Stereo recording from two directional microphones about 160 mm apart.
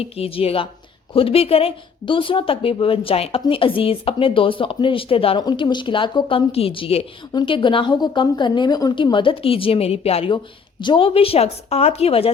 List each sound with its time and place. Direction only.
0.0 s speech: 35° left (ahead or behind)